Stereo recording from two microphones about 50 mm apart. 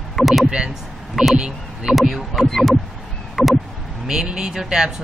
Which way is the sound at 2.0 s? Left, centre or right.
Centre.